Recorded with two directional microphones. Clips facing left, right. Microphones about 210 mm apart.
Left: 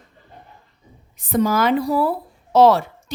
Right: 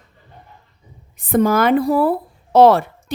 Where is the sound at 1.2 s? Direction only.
55° right (ahead or behind).